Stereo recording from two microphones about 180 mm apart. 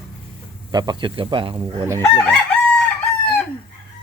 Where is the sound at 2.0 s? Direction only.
5° left (ahead or behind).